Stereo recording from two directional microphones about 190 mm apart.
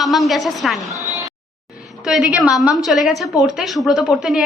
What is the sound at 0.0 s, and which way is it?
Speech, centre (ahead or behind).